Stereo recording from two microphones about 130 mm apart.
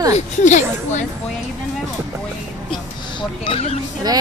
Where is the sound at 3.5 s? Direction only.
45° left (ahead or behind).